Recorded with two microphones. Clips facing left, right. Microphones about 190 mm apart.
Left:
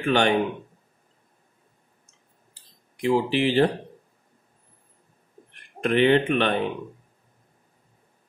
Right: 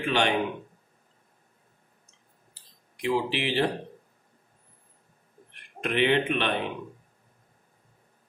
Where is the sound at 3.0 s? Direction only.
45° left (ahead or behind).